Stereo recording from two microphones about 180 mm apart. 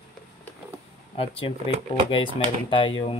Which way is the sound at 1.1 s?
30° left (ahead or behind).